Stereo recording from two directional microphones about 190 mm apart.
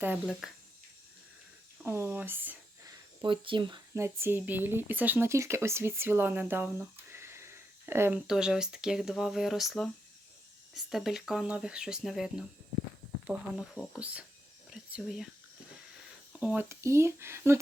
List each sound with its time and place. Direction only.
0.0 s speech: 5° right (ahead or behind)
1.8 s speech: 10° right (ahead or behind)
3.2 s speech: 25° right (ahead or behind)
3.9 s speech: 15° right (ahead or behind)
16.4 s speech: 10° right (ahead or behind)